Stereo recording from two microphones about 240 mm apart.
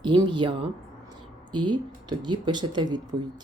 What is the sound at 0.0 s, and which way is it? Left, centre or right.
Speech, centre.